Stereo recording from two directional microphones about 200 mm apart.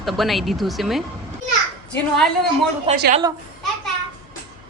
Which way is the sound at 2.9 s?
30° right (ahead or behind).